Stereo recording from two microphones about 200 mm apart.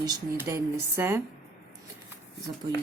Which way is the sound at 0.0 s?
15° right (ahead or behind).